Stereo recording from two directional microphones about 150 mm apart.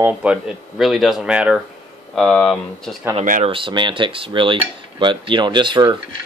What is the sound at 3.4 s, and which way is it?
Speech, 35° right (ahead or behind).